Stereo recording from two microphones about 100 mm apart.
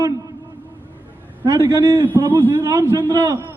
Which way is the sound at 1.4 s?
40° right (ahead or behind).